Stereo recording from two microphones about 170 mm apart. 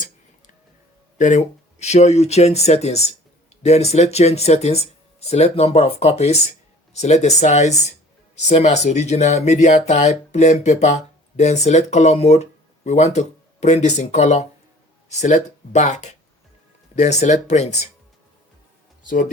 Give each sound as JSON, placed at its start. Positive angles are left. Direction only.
{"t": 1.2, "sound": "speech", "side_deg": 45}